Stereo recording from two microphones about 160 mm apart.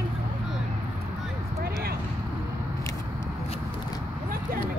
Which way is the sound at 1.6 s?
70° right (ahead or behind).